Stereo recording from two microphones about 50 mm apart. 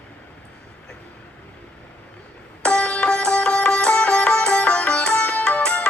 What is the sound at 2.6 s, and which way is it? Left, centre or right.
Sitar, left.